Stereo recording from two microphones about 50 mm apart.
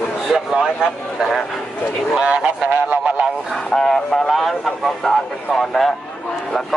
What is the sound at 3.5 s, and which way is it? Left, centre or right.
Speech, centre.